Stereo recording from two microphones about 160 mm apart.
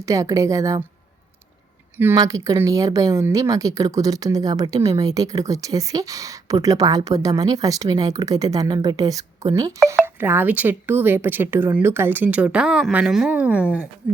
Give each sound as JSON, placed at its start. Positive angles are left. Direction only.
{"t": 0.0, "sound": "speech", "side_deg": -20}
{"t": 2.0, "sound": "speech", "side_deg": -15}